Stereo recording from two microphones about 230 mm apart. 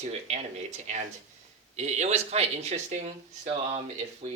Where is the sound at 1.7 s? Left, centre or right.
Right.